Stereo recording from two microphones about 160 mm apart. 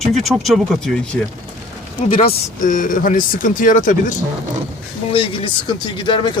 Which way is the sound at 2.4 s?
55° left (ahead or behind).